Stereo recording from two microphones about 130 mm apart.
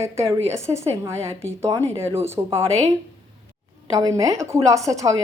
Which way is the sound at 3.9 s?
30° right (ahead or behind).